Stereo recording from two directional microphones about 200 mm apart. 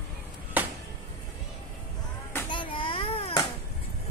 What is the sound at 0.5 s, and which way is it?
Music, 10° right (ahead or behind).